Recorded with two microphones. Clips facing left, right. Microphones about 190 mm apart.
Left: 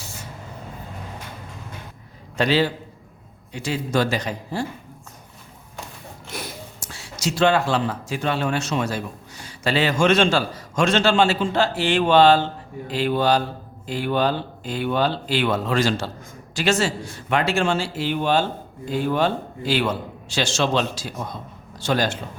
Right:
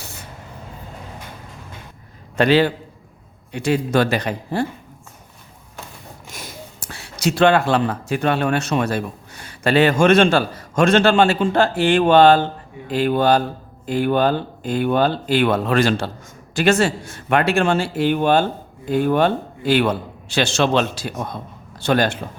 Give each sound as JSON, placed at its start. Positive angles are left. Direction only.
{"t": 0.0, "sound": "spray", "side_deg": -60}
{"t": 2.3, "sound": "a man's voice", "side_deg": -55}
{"t": 6.7, "sound": "speech", "side_deg": -60}